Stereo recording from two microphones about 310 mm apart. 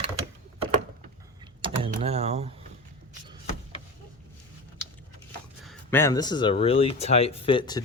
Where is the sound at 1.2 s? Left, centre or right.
Centre.